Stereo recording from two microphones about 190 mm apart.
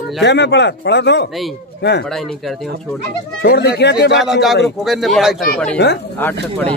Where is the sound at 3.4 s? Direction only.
55° left (ahead or behind).